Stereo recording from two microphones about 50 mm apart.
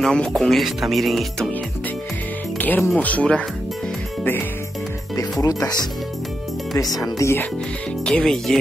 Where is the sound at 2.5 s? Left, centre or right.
Left.